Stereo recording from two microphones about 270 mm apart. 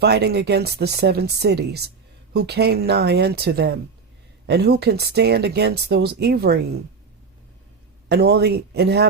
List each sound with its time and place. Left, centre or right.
0.0 s speech: right
8.1 s speech: right